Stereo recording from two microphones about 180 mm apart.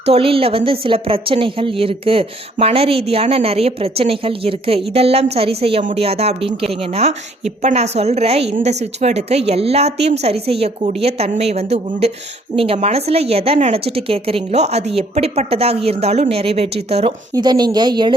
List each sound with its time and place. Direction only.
0.0 s a woman's voice: 35° right (ahead or behind)
17.3 s a woman's voice: 20° right (ahead or behind)